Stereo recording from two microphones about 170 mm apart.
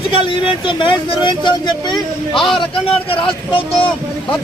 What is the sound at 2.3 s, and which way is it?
Speech, centre (ahead or behind).